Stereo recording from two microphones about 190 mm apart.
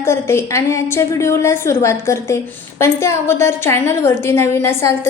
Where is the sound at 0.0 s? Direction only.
15° left (ahead or behind).